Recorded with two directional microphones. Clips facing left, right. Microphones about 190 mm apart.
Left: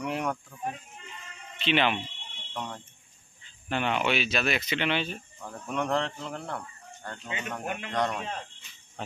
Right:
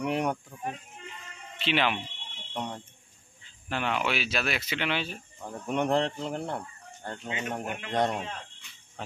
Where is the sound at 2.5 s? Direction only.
20° right (ahead or behind).